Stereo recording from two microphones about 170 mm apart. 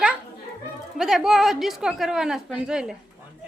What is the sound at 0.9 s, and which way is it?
A woman's voice, centre (ahead or behind).